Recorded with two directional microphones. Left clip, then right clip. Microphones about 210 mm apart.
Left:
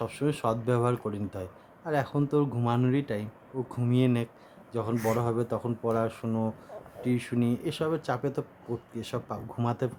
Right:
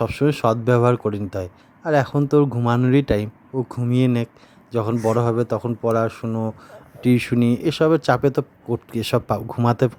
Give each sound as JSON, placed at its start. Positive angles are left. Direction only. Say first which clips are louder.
{"t": 0.0, "sound": "a man's voice", "louder": "right 10 dB", "side_deg": -35}
{"t": 6.7, "sound": "speech", "louder": "right 11 dB", "side_deg": -35}